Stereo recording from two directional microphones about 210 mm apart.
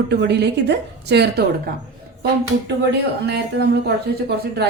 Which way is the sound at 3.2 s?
50° right (ahead or behind).